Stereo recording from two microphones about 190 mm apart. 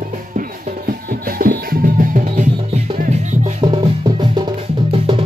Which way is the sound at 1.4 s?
50° right (ahead or behind).